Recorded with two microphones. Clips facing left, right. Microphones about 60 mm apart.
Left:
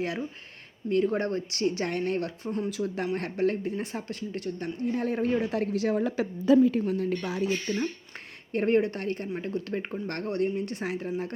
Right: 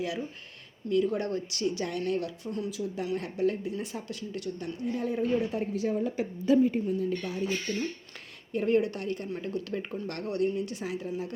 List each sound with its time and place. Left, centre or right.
0.9 s a woman's voice: left
2.6 s a woman's voice: left
6.7 s a woman's voice: left
7.7 s speech: left
8.5 s speech: left